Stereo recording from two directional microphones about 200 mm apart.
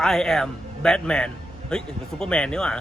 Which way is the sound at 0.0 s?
Centre (ahead or behind).